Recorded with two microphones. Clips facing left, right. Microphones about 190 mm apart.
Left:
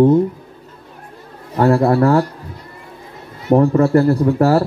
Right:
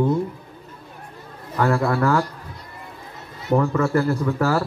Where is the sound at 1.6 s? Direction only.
35° left (ahead or behind).